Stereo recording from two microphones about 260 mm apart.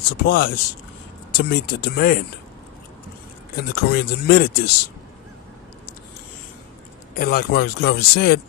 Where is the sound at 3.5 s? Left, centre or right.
Left.